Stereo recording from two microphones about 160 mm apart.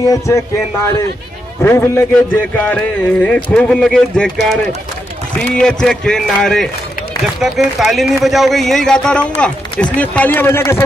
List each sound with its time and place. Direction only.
0.3 s speech: 20° left (ahead or behind)
1.6 s a man's voice: 15° left (ahead or behind)